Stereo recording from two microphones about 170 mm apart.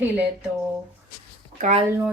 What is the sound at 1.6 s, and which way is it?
Speech, 45° right (ahead or behind).